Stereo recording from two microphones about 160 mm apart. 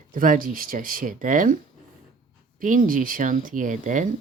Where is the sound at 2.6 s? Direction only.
55° right (ahead or behind).